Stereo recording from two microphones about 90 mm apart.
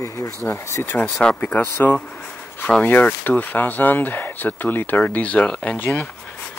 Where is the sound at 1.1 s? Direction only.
10° left (ahead or behind).